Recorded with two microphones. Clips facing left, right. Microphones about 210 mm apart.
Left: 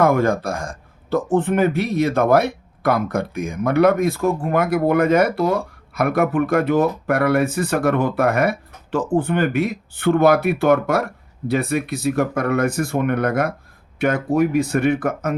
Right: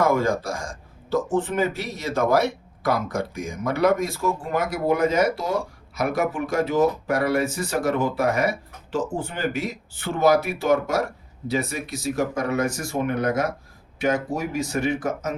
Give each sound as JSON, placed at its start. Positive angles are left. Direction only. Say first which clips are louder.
{"t": 0.0, "sound": "speech", "louder": "left 4 dB", "side_deg": 60}